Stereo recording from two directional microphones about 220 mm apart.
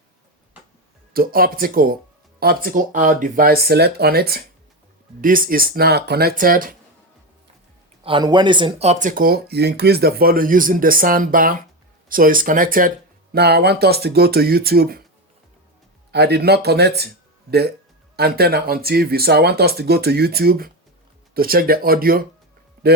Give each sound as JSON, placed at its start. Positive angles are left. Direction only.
{"t": 1.1, "sound": "speech", "side_deg": -40}
{"t": 8.0, "sound": "speech", "side_deg": -20}
{"t": 16.1, "sound": "speech", "side_deg": -45}
{"t": 18.2, "sound": "speech", "side_deg": -45}